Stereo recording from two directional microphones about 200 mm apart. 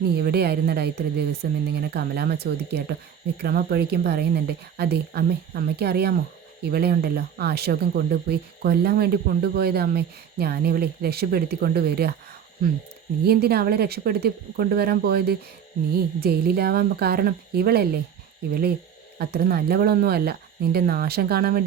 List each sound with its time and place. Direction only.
0.0 s speech: 55° right (ahead or behind)
13.2 s speech: 50° right (ahead or behind)
19.2 s speech: 50° right (ahead or behind)